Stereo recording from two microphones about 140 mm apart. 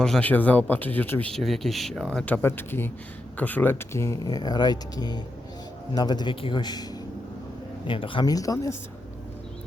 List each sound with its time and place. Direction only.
0.0 s speech: 10° left (ahead or behind)
1.3 s a man's voice: centre (ahead or behind); by 6.8 s 30° left (ahead or behind)
7.9 s speech: 40° left (ahead or behind)